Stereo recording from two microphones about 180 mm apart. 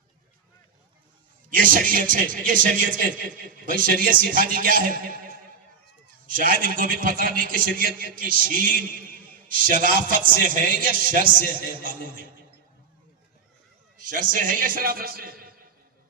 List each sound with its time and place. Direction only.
1.5 s a man's voice: 50° right (ahead or behind)
6.3 s a man's voice: 50° right (ahead or behind)
14.0 s a man's voice: 50° right (ahead or behind)